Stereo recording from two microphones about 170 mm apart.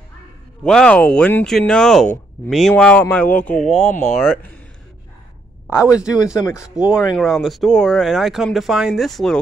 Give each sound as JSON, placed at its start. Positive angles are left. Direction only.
{"t": 0.7, "sound": "speech", "side_deg": 5}
{"t": 3.8, "sound": "speech", "side_deg": 45}
{"t": 5.8, "sound": "speech", "side_deg": -5}